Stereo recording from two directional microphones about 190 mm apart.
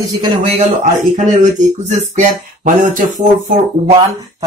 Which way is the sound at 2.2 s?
45° right (ahead or behind).